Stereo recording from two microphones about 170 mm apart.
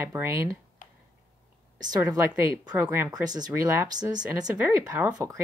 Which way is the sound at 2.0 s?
20° right (ahead or behind).